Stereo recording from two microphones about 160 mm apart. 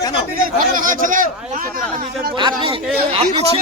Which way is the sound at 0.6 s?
60° right (ahead or behind).